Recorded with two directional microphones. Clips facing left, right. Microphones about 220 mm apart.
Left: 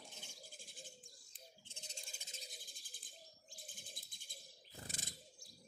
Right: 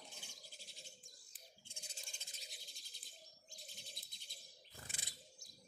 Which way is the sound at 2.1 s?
5° left (ahead or behind).